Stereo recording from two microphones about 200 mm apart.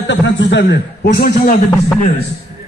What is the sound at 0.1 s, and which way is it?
A man's voice, 60° left (ahead or behind).